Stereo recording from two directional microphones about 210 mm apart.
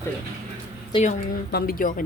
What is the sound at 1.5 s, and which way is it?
Speech, 45° left (ahead or behind).